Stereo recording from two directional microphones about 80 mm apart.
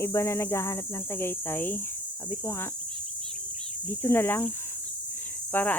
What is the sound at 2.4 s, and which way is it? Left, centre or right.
Speech, left.